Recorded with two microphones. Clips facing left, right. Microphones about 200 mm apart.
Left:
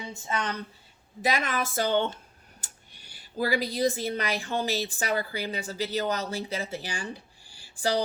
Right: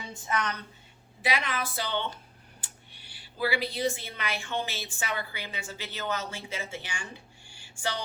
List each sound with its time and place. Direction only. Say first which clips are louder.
0.1 s a woman's voice: right 1 dB; 25° left (ahead or behind)
1.2 s speech: left 3 dB; 45° left (ahead or behind)